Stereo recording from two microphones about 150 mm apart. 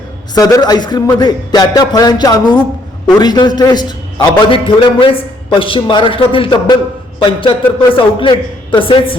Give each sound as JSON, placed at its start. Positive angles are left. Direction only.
{"t": 0.3, "sound": "a man's voice", "side_deg": 25}